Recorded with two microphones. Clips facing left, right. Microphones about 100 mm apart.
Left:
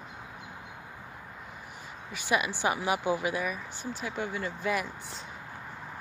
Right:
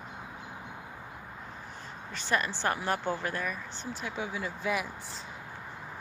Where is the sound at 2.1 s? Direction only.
10° left (ahead or behind).